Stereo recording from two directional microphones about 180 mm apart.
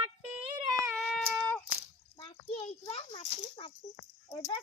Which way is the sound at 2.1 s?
30° left (ahead or behind).